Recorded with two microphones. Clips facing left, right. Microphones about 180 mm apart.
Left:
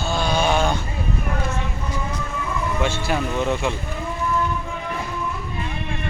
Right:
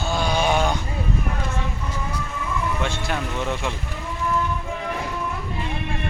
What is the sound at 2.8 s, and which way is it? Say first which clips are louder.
Speech: left 4 dB; 5° left (ahead or behind).